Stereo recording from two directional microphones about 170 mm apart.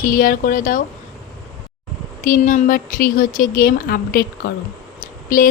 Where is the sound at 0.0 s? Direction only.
55° left (ahead or behind).